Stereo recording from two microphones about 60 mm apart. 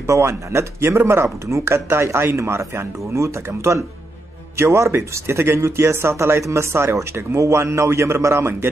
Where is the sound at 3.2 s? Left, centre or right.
Right.